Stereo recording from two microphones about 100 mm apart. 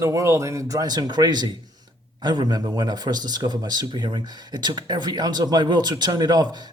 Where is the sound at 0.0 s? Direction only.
30° right (ahead or behind).